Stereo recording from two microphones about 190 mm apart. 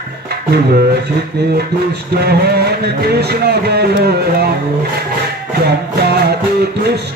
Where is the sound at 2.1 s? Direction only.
55° right (ahead or behind).